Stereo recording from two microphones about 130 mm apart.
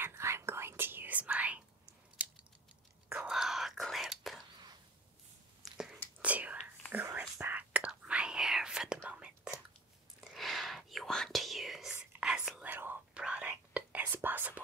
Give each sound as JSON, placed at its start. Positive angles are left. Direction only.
{"t": 0.0, "sound": "whispering", "side_deg": -20}
{"t": 2.2, "sound": "a sound", "side_deg": -10}
{"t": 3.1, "sound": "whispering", "side_deg": -5}
{"t": 5.6, "sound": "a sound", "side_deg": -5}
{"t": 6.2, "sound": "whispering", "side_deg": -10}
{"t": 10.3, "sound": "whispering", "side_deg": 0}